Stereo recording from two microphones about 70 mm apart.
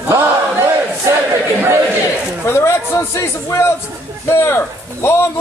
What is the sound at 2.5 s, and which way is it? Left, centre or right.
A man's voice, left.